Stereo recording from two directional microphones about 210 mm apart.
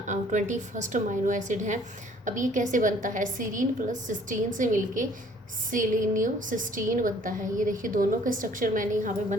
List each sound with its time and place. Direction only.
0.1 s a woman's voice: 35° right (ahead or behind)